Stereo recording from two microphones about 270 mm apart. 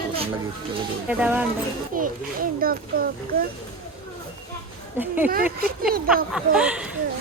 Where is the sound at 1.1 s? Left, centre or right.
Centre.